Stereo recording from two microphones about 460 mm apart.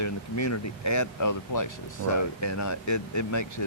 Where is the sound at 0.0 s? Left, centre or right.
Left.